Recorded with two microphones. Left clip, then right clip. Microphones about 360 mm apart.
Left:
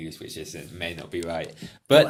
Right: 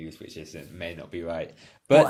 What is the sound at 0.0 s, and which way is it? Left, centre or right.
Speech, right.